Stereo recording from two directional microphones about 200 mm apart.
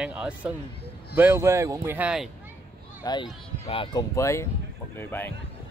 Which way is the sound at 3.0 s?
25° left (ahead or behind).